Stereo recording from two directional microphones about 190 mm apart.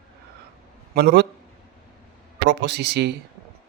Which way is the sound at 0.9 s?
60° right (ahead or behind).